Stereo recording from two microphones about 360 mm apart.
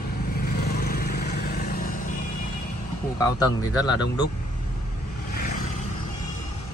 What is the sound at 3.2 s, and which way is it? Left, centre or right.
Speech, centre.